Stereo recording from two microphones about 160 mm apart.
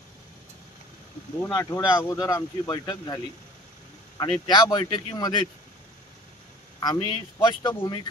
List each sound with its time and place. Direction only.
1.5 s speech: 25° left (ahead or behind)
4.2 s speech: 25° left (ahead or behind)
6.8 s speech: 25° left (ahead or behind)